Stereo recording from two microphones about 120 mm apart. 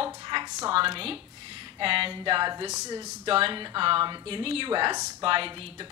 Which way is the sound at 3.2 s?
50° right (ahead or behind).